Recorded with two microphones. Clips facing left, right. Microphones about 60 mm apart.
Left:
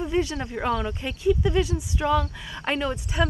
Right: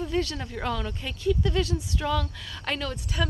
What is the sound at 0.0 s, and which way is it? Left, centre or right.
Speech, centre.